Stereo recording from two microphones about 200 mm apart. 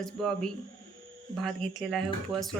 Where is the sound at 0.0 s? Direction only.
Centre (ahead or behind).